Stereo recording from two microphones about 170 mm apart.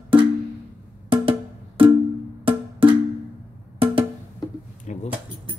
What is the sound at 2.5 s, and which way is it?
Cowbell, 30° right (ahead or behind).